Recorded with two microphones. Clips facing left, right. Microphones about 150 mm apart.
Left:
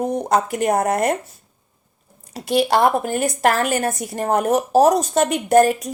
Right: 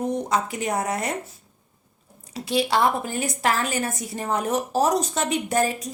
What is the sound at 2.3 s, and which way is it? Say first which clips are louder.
A woman's voice: left 5 dB; 50° left (ahead or behind).